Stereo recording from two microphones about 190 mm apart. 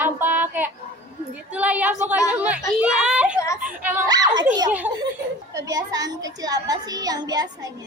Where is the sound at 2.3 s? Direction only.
5° right (ahead or behind).